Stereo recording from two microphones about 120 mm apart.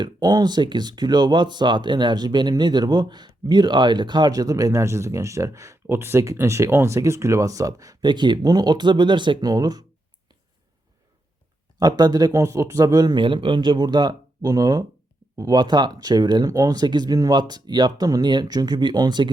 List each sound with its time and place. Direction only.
0.0 s speech: 35° right (ahead or behind)
11.8 s speech: 35° right (ahead or behind)